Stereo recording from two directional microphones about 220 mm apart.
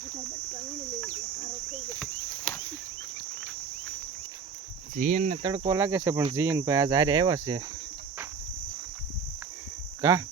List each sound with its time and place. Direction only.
4.9 s speech: 35° right (ahead or behind)
5.4 s speech: 20° right (ahead or behind)
10.0 s speech: 15° right (ahead or behind)